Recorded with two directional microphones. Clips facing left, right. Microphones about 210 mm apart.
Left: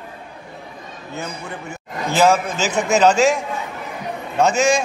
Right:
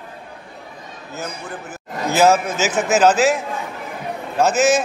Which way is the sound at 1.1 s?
5° right (ahead or behind).